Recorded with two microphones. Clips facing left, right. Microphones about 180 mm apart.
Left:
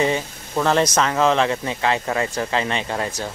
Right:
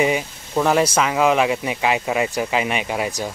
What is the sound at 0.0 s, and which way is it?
Speech, 10° right (ahead or behind).